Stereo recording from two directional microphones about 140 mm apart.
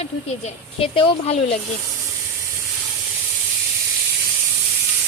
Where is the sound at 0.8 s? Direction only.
40° left (ahead or behind).